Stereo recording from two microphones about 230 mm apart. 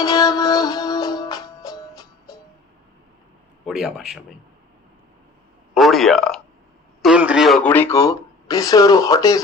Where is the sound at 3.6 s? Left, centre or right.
Centre.